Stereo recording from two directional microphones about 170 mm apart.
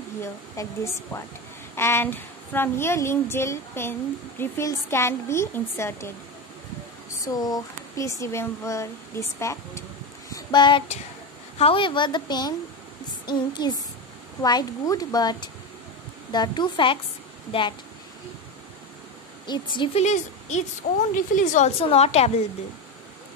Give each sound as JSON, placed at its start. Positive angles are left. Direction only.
{"t": 0.2, "sound": "speech", "side_deg": 15}
{"t": 7.2, "sound": "speech", "side_deg": 20}
{"t": 10.3, "sound": "a sound", "side_deg": 25}
{"t": 11.5, "sound": "speech", "side_deg": 35}
{"t": 19.4, "sound": "a woman's voice", "side_deg": 25}